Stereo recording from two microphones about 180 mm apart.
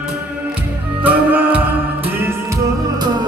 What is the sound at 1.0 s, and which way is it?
Music, 10° right (ahead or behind).